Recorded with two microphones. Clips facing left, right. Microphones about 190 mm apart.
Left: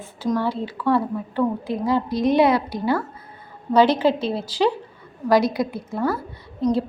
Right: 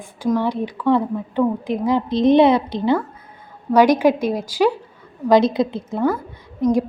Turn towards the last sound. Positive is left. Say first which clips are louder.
# right 3 dB
turn(degrees=-15)  # may be behind; listen again after turning